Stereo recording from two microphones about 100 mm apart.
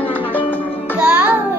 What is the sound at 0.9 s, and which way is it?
Music, 15° right (ahead or behind).